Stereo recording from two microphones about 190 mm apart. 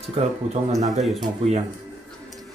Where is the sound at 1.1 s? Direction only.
35° right (ahead or behind).